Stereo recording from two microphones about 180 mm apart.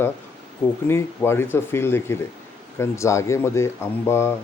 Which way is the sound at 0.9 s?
15° left (ahead or behind).